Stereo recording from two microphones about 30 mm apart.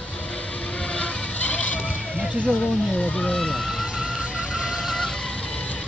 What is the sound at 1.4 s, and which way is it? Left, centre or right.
Vehicle, left.